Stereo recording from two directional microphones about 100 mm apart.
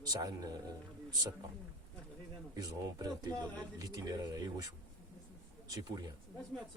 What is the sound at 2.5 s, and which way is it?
Speech, 40° right (ahead or behind).